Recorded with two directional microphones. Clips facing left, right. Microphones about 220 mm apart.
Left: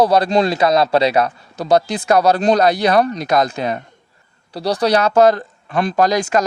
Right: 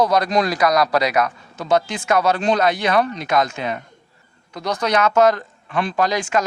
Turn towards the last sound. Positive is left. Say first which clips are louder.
# left 4 dB
turn(degrees=40)  # may be behind; listen again after turning